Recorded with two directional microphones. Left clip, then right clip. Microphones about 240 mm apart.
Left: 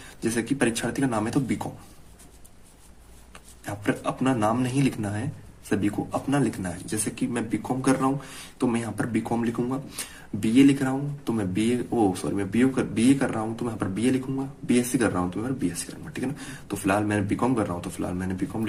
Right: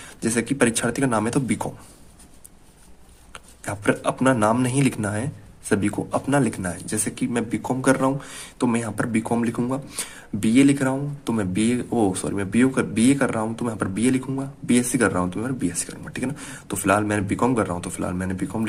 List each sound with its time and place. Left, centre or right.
0.2 s speech: right
3.3 s speech: right